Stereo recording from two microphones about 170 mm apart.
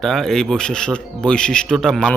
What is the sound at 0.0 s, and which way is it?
Speech, 5° left (ahead or behind).